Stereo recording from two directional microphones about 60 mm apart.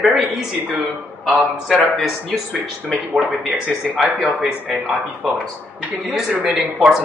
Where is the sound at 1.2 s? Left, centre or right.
Centre.